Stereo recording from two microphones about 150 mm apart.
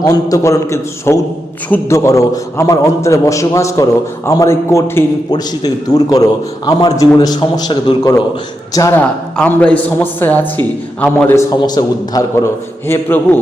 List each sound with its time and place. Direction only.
0.0 s a man's voice: 20° left (ahead or behind)
9.0 s a man's voice: 10° left (ahead or behind)
11.6 s a man's voice: 25° left (ahead or behind)
12.9 s a man's voice: 15° left (ahead or behind)